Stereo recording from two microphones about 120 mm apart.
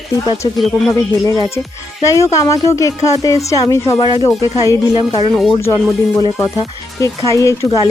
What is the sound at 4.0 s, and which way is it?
Speech, 40° left (ahead or behind).